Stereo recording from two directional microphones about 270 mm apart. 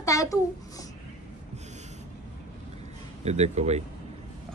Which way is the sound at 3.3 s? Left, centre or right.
Right.